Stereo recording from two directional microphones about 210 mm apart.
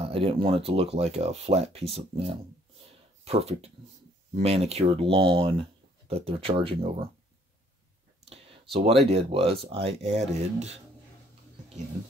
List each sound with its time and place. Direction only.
0.0 s speech: 25° right (ahead or behind)
8.5 s speech: 30° right (ahead or behind)